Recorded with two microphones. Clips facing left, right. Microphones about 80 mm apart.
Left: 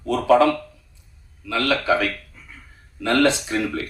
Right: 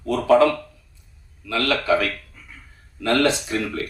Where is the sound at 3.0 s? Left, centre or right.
Left.